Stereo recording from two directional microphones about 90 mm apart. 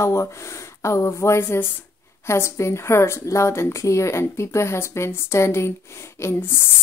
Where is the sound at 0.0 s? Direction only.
30° left (ahead or behind).